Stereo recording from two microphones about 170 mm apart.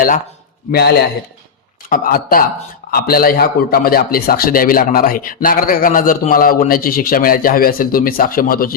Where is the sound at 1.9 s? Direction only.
55° left (ahead or behind).